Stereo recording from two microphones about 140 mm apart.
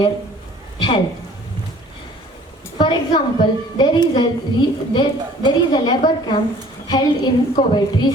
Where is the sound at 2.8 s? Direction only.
35° left (ahead or behind).